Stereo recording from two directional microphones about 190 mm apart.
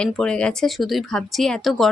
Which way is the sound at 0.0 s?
5° left (ahead or behind).